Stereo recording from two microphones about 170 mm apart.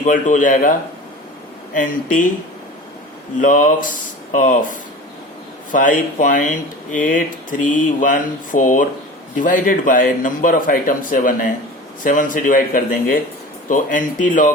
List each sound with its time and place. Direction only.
0.0 s speech: 50° left (ahead or behind)
3.4 s speech: 50° left (ahead or behind)
5.7 s speech: 50° left (ahead or behind)